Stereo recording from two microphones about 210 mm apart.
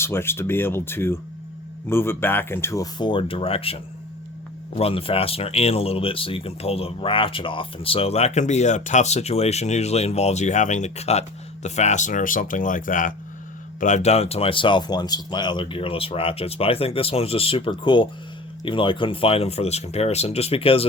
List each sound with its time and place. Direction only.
0.0 s speech: 10° left (ahead or behind); by 3.8 s 25° left (ahead or behind)
4.8 s speech: 25° left (ahead or behind)